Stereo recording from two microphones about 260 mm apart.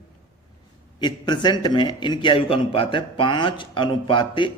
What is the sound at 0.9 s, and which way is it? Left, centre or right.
A man's voice, centre.